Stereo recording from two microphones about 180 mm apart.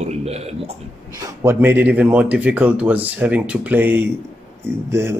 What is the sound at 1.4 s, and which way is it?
Speech, 10° right (ahead or behind).